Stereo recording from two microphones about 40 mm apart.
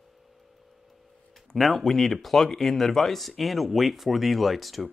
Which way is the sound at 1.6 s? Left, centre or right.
Centre.